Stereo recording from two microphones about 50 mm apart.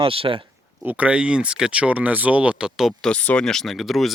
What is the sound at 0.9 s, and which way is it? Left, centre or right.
Speech, right.